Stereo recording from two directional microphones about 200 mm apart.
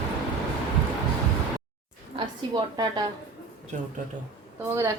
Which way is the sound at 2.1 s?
20° right (ahead or behind).